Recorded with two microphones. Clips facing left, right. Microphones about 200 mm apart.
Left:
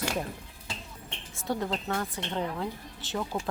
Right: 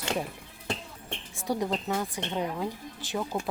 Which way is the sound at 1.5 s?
15° right (ahead or behind).